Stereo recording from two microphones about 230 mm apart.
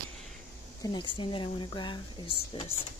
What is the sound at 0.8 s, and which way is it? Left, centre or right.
Speech, centre.